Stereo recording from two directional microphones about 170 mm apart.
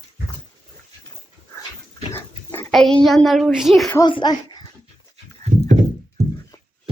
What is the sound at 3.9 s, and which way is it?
Speech, 25° left (ahead or behind).